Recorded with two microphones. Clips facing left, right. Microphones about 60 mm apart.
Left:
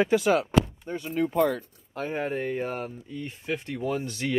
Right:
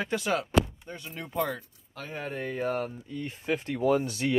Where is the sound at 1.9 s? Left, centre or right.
Left.